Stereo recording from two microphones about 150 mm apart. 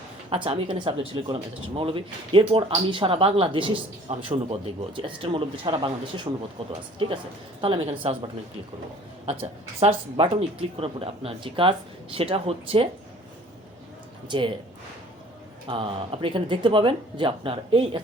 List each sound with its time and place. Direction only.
0.3 s speech: 35° right (ahead or behind)
7.6 s speech: 35° right (ahead or behind)
9.2 s speech: 45° right (ahead or behind)
14.3 s speech: 35° right (ahead or behind)
15.6 s speech: 35° right (ahead or behind)